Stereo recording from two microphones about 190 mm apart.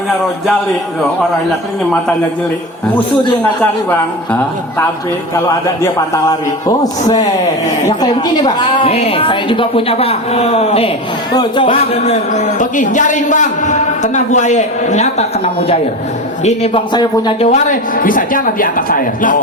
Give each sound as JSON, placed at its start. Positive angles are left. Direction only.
{"t": 3.6, "sound": "speech", "side_deg": 10}
{"t": 7.9, "sound": "a woman's voice", "side_deg": 20}
{"t": 16.9, "sound": "a woman's voice", "side_deg": 25}
{"t": 17.5, "sound": "speech", "side_deg": 45}